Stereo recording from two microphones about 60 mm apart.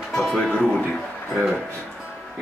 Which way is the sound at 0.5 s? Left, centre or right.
Left.